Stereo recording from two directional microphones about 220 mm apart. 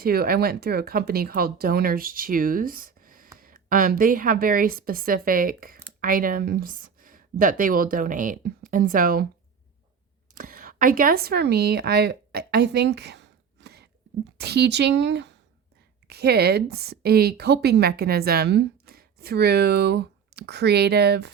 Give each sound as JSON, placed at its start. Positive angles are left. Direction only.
{"t": 0.0, "sound": "a woman's voice", "side_deg": -45}
{"t": 10.3, "sound": "a woman's voice", "side_deg": -40}